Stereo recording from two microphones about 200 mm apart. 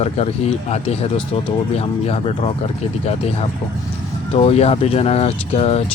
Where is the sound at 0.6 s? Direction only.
35° left (ahead or behind).